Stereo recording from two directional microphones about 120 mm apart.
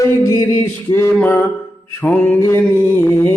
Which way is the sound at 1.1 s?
15° left (ahead or behind).